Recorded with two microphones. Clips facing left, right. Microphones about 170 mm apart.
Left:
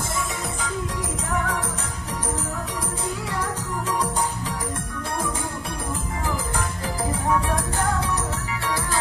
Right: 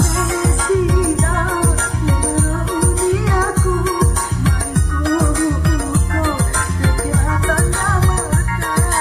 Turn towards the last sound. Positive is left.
turn(degrees=-90)